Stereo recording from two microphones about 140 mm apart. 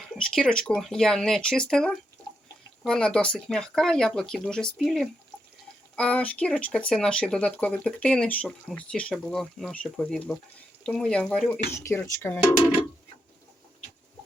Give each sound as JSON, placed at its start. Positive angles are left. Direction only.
{"t": 0.1, "sound": "speech", "side_deg": 5}